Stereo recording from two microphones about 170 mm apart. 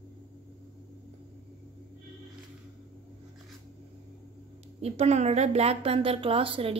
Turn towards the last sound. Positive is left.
turn(degrees=-30)  # may be behind; listen again after turning